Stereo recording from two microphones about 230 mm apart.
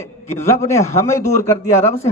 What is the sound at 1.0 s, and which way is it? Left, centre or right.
Speech, centre.